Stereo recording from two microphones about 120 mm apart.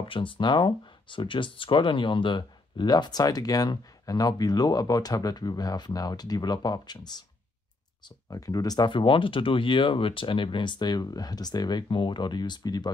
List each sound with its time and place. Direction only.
0.0 s speech: 45° left (ahead or behind)
8.3 s speech: 30° left (ahead or behind)